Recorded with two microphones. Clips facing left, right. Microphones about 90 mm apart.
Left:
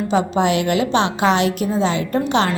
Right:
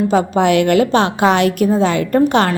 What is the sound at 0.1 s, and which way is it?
A woman's voice, 55° right (ahead or behind).